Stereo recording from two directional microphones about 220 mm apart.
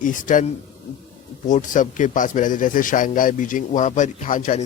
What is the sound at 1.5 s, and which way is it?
A man's voice, 35° left (ahead or behind).